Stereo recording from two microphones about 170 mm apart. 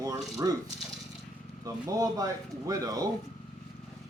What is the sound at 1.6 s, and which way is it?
Speech, 20° right (ahead or behind).